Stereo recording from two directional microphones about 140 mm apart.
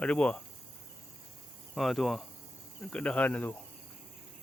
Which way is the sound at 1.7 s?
Centre (ahead or behind).